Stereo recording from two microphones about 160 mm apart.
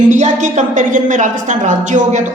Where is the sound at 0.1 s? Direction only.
50° right (ahead or behind).